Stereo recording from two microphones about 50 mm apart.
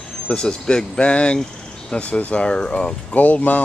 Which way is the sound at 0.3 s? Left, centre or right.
Centre.